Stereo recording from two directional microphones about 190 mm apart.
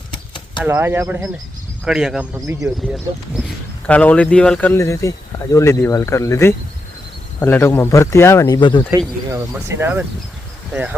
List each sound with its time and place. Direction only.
0.6 s speech: 10° right (ahead or behind)
2.3 s speech: 15° right (ahead or behind)
3.8 s speech: 5° left (ahead or behind); by 8.8 s 25° left (ahead or behind)
8.9 s speech: 15° right (ahead or behind)